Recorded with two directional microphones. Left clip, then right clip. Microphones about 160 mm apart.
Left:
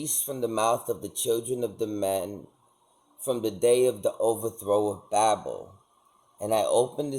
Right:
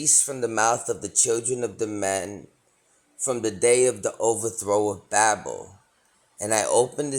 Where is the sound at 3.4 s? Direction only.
40° right (ahead or behind).